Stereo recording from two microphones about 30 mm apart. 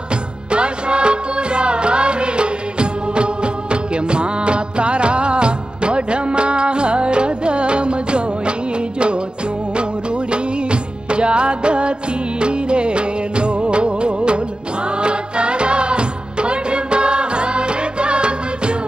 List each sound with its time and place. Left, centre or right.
0.5 s music: right
3.7 s music of bollywood: right
10.3 s music: right